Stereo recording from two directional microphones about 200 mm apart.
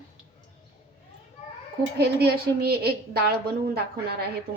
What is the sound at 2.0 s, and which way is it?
A woman's voice, 55° right (ahead or behind).